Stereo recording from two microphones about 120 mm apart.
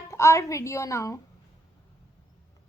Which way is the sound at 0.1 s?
25° left (ahead or behind).